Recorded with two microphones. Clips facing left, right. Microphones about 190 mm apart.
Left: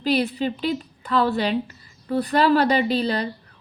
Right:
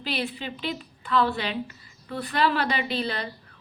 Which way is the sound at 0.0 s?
40° left (ahead or behind).